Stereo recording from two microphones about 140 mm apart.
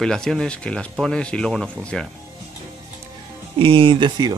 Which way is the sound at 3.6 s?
40° right (ahead or behind).